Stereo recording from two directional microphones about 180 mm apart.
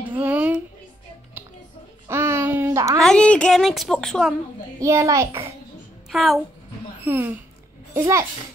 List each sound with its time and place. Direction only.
0.1 s a sound: 10° right (ahead or behind)
2.0 s a sound: 15° right (ahead or behind)
3.0 s a woman's voice: 5° left (ahead or behind)
4.7 s a child's voice: 15° right (ahead or behind)
6.0 s a woman's voice: centre (ahead or behind)
7.1 s a child's voice: 10° right (ahead or behind)